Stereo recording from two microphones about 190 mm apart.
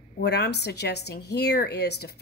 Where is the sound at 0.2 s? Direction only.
60° left (ahead or behind).